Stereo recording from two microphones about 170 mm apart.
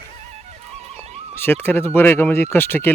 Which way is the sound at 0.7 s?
40° right (ahead or behind).